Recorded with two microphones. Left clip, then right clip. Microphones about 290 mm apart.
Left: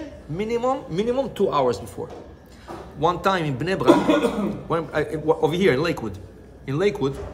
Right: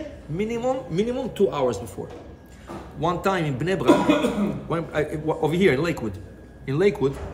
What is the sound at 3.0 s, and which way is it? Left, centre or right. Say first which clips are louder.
A woman's voice: left 3 dB; centre.